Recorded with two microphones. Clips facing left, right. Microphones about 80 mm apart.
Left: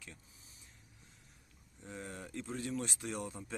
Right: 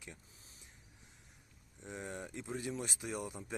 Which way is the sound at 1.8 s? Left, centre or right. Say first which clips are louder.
Right 2 dB; centre.